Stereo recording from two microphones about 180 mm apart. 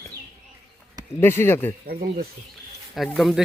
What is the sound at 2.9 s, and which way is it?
Speech, centre (ahead or behind).